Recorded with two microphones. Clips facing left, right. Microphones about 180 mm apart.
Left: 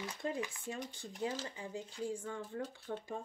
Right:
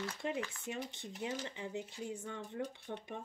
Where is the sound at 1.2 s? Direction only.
20° right (ahead or behind).